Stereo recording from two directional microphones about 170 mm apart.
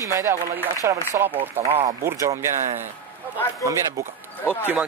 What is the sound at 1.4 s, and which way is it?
Speech, 40° right (ahead or behind).